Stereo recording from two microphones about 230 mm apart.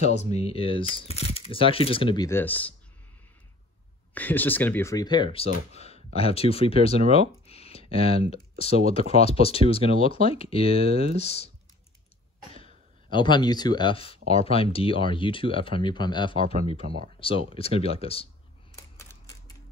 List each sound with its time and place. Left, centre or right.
0.0 s speech: left; by 2.7 s centre
4.1 s speech: centre; by 11.5 s left
13.1 s speech: centre